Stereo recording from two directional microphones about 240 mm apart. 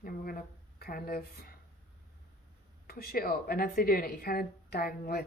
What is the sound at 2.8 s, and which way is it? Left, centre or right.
A woman's voice, left.